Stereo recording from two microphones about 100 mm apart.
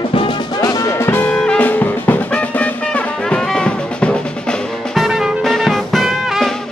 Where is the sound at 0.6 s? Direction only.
40° left (ahead or behind).